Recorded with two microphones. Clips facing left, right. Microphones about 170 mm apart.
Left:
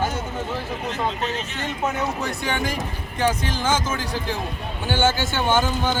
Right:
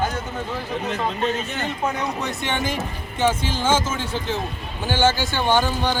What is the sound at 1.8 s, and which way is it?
Speech, centre (ahead or behind).